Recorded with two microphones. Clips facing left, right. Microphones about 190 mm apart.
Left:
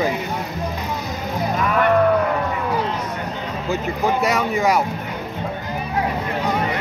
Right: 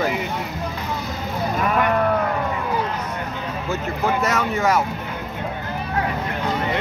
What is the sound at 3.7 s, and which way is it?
Speech, 15° left (ahead or behind).